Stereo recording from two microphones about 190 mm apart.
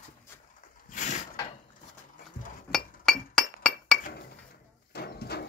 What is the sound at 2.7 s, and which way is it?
Chink, 5° left (ahead or behind).